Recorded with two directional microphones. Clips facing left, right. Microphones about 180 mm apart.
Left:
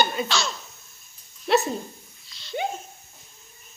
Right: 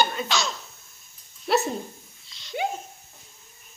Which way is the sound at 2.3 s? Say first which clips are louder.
Left 3 dB; 20° right (ahead or behind).